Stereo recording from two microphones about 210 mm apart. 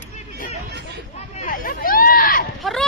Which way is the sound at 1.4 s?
40° left (ahead or behind).